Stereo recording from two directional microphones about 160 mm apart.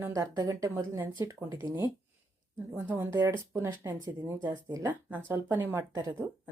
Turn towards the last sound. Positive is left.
turn(degrees=-15)  # may be behind; listen again after turning